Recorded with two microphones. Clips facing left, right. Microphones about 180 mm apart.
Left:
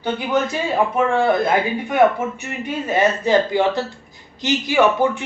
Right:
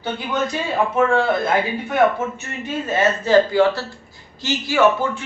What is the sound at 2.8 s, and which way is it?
A man's voice, 15° left (ahead or behind).